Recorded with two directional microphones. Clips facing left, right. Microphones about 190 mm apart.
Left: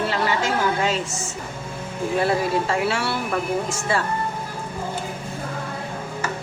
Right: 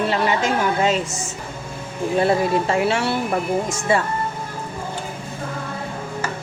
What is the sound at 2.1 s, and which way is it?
Speech, 25° right (ahead or behind).